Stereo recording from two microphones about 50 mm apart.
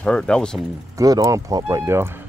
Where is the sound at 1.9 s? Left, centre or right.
Right.